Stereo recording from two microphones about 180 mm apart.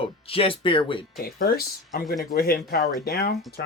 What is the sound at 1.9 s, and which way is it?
Speech, 60° left (ahead or behind).